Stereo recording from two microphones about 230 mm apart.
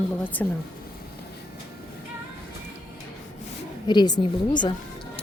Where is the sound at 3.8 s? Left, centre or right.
Centre.